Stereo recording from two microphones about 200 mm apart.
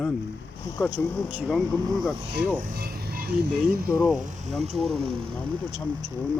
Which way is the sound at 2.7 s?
50° right (ahead or behind).